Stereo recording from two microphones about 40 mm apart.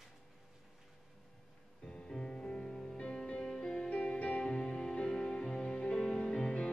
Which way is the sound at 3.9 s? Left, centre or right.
Left.